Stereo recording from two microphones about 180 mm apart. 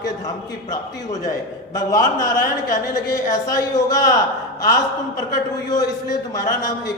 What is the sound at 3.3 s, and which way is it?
Speech, 20° left (ahead or behind).